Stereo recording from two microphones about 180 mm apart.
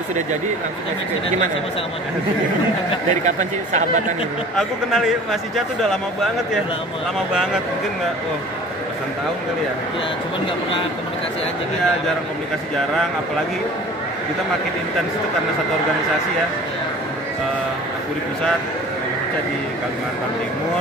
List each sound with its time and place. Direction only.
3.3 s speech: 40° right (ahead or behind)
4.6 s a man's voice: centre (ahead or behind)